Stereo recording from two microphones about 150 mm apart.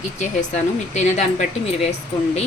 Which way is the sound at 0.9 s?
50° left (ahead or behind).